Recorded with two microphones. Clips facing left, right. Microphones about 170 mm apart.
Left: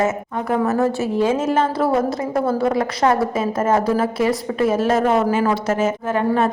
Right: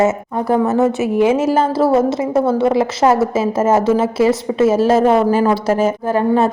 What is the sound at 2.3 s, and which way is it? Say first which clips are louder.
Speech: right 4 dB; centre (ahead or behind).